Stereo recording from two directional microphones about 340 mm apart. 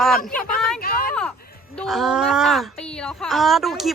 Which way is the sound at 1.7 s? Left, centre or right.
Centre.